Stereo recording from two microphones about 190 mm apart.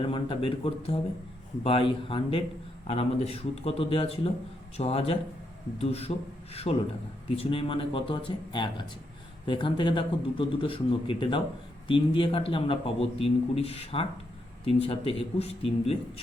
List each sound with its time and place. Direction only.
0.1 s a man's voice: 25° left (ahead or behind)